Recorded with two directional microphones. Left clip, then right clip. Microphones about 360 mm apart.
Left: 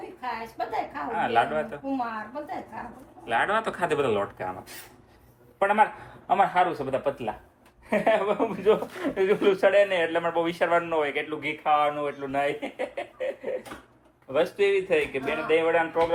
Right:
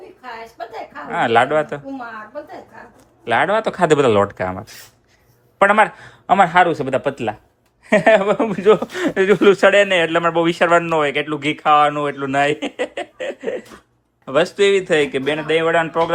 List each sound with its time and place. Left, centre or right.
1.1 s speech: centre
3.2 s speech: centre
5.5 s a man's voice: right